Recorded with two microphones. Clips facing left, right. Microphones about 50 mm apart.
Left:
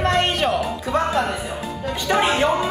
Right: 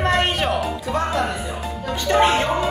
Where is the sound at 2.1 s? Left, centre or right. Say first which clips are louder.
Right 1 dB; centre.